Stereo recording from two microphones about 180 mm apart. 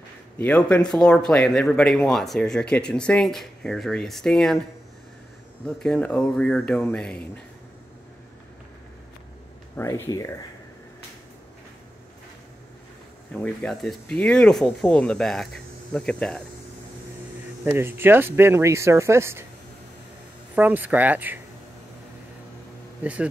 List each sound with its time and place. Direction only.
0.4 s speech: 5° left (ahead or behind)
5.7 s speech: 5° left (ahead or behind)
9.8 s speech: 15° left (ahead or behind)
13.3 s speech: 5° left (ahead or behind)
17.6 s speech: 15° right (ahead or behind)
20.5 s speech: 10° right (ahead or behind)
23.0 s speech: 5° right (ahead or behind)